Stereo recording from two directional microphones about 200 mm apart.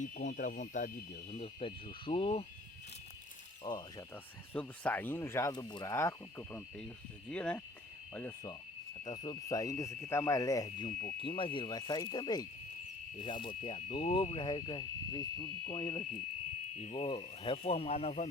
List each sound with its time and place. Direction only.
0.0 s a sound: 40° left (ahead or behind)
1.3 s speech: 30° left (ahead or behind)
3.6 s speech: 20° left (ahead or behind)
4.5 s speech: 5° left (ahead or behind)
9.0 s speech: 20° left (ahead or behind)